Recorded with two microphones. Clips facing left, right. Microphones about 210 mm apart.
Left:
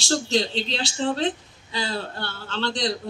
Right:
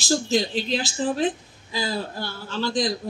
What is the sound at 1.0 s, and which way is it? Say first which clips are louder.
Speech: even; 75° left (ahead or behind).